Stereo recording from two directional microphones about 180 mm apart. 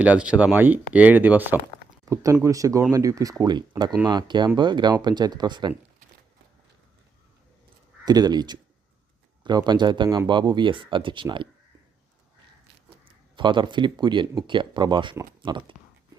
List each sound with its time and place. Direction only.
0.0 s speech: 5° right (ahead or behind); by 5.7 s 25° right (ahead or behind)
8.0 s speech: 20° right (ahead or behind)
13.3 s speech: 25° right (ahead or behind)